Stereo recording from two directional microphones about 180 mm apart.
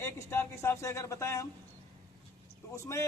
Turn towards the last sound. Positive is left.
turn(degrees=15)  # may be behind; listen again after turning